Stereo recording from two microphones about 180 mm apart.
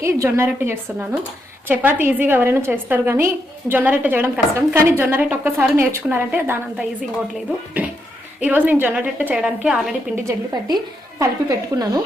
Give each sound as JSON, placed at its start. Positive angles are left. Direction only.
{"t": 0.0, "sound": "a woman's voice", "side_deg": -15}
{"t": 8.4, "sound": "a woman's voice", "side_deg": -10}
{"t": 10.2, "sound": "a woman's voice", "side_deg": -20}